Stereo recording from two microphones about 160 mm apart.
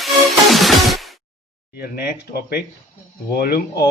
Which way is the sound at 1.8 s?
75° left (ahead or behind).